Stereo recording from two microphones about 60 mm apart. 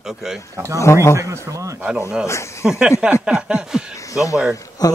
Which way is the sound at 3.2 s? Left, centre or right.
Centre.